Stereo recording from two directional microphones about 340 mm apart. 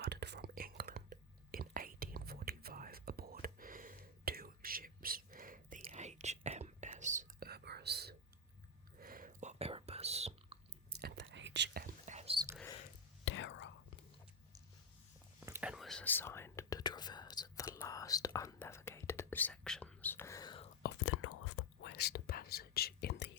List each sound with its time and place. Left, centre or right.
0.0 s whispering: right
10.9 s whispering: right
13.2 s whispering: left
15.4 s whispering: centre
20.8 s whispering: left